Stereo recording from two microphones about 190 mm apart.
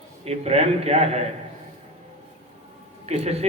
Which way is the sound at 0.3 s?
35° right (ahead or behind).